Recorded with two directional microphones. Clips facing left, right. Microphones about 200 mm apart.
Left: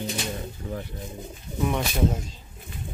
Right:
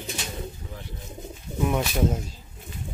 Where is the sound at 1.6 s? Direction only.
5° right (ahead or behind).